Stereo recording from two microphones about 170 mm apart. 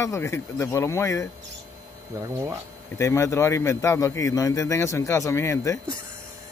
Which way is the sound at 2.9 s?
15° left (ahead or behind).